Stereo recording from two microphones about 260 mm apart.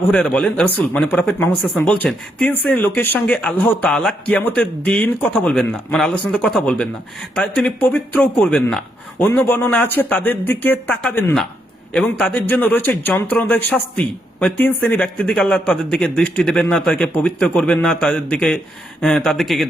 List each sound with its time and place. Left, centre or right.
0.1 s speech: centre